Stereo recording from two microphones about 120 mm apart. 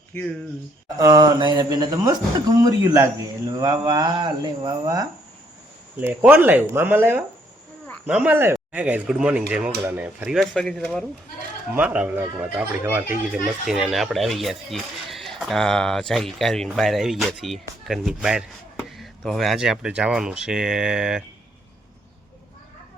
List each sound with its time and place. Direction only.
0.9 s speech: 30° right (ahead or behind)
6.0 s speech: 15° right (ahead or behind)
10.3 s speech: 5° left (ahead or behind)
11.7 s speech: 10° right (ahead or behind)
13.7 s speech: centre (ahead or behind)